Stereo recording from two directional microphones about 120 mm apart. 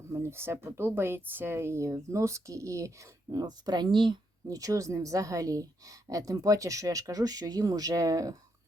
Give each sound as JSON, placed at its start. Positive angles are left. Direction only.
{"t": 0.1, "sound": "speech", "side_deg": -20}